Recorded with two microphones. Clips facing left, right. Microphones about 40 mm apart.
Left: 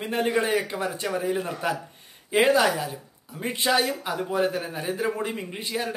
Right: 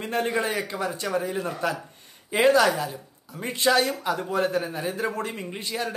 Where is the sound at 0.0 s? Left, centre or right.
Centre.